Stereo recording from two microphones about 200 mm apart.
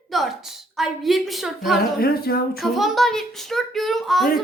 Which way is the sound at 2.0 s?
50° left (ahead or behind).